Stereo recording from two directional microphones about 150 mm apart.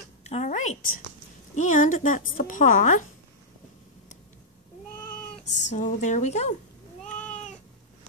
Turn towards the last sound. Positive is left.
turn(degrees=5)  # may be behind; listen again after turning